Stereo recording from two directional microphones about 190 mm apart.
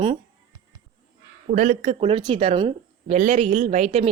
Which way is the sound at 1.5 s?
40° right (ahead or behind).